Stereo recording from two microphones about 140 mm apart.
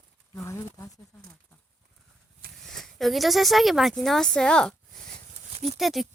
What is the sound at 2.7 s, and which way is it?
Speech, centre (ahead or behind).